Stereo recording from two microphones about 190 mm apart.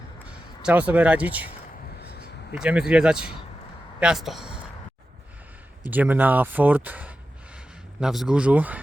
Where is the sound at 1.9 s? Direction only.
60° left (ahead or behind).